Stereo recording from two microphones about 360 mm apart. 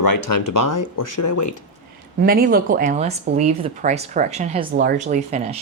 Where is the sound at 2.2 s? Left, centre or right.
Right.